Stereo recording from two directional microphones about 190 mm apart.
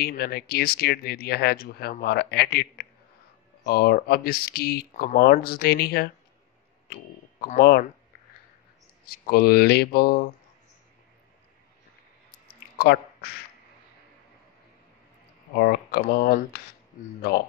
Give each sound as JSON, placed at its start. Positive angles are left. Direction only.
{"t": 0.0, "sound": "speech", "side_deg": 55}
{"t": 9.0, "sound": "speech", "side_deg": 55}
{"t": 12.4, "sound": "a sound", "side_deg": 55}
{"t": 15.5, "sound": "speech", "side_deg": 55}